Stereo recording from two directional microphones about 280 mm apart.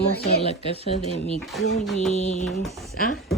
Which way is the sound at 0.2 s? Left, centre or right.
Left.